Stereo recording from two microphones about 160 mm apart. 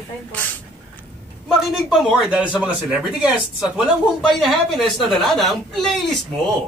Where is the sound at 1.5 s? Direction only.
Centre (ahead or behind).